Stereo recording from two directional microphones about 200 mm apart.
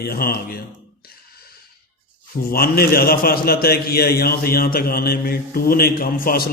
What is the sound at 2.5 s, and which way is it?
A man's voice, 50° left (ahead or behind).